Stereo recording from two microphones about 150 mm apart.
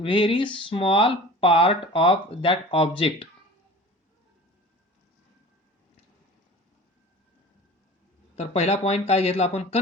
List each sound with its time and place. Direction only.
0.0 s speech: 35° left (ahead or behind)
8.4 s speech: 45° left (ahead or behind)